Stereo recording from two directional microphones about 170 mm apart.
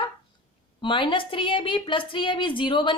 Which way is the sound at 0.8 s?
30° left (ahead or behind).